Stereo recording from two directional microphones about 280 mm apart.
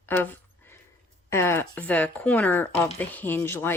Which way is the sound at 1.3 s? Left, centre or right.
Centre.